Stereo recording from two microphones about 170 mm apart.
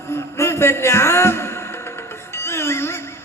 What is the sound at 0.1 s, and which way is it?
Music, 15° left (ahead or behind).